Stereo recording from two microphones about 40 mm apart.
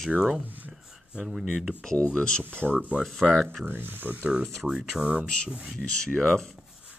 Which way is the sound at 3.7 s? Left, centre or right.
Right.